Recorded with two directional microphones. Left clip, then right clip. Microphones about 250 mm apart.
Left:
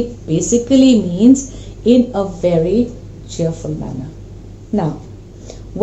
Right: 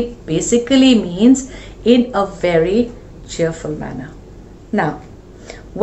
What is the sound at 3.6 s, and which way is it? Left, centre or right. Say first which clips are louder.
Speech: right 1 dB; right.